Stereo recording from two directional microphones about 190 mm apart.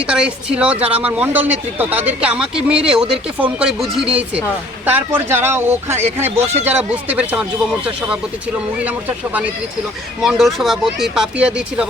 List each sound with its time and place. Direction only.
0.0 s speech: 5° right (ahead or behind)
8.8 s speech: 10° right (ahead or behind)